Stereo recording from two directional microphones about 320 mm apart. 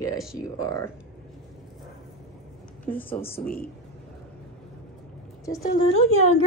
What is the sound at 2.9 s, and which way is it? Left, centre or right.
Speech, centre.